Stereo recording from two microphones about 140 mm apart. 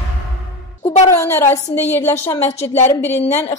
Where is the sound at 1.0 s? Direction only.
20° left (ahead or behind).